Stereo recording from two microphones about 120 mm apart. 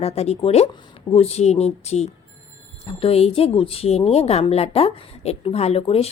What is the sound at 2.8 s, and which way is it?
Speech, 55° left (ahead or behind).